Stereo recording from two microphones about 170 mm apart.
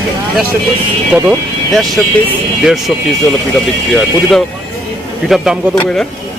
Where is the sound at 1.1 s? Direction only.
5° right (ahead or behind).